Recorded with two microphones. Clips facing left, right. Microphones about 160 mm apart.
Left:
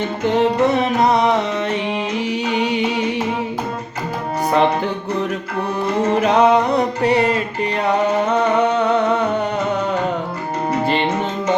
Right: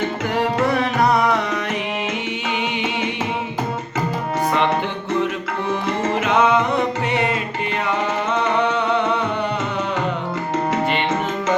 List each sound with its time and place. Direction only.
0.3 s music: 20° left (ahead or behind)
2.5 s music: 40° left (ahead or behind)
6.1 s music: 35° left (ahead or behind)
8.6 s a sound: 45° left (ahead or behind)